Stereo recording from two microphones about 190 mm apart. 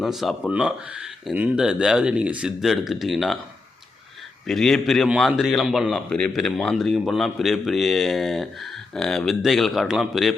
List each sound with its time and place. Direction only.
0.0 s a man's voice: centre (ahead or behind)
4.4 s a man's voice: centre (ahead or behind)